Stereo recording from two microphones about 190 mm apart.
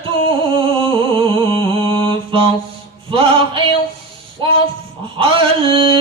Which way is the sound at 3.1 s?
25° right (ahead or behind).